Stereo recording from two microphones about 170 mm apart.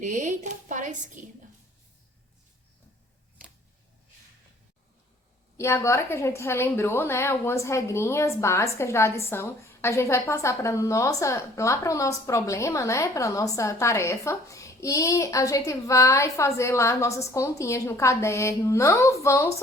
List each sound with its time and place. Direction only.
0.0 s speech: 45° right (ahead or behind)
5.5 s a woman's voice: 15° left (ahead or behind)